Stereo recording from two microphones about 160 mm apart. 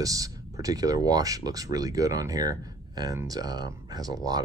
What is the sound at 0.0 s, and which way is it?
Speech, 20° right (ahead or behind).